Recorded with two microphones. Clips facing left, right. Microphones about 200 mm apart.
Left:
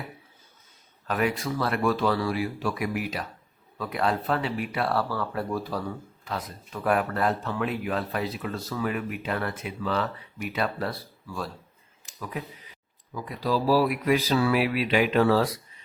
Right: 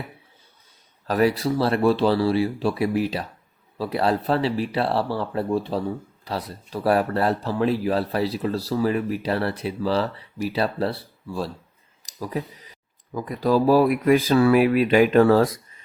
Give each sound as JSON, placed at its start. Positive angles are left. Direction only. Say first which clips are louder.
{"t": 1.0, "sound": "speech", "louder": "right 6 dB", "side_deg": -35}
{"t": 12.0, "sound": "a sound", "louder": "right 7 dB", "side_deg": -35}
{"t": 13.1, "sound": "speech", "louder": "right 7 dB", "side_deg": -50}